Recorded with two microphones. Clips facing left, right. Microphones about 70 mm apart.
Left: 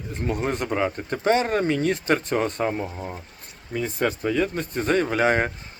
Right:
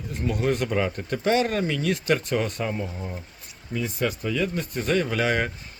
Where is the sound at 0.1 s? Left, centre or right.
Left.